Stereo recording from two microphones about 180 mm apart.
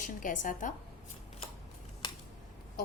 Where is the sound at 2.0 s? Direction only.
25° left (ahead or behind).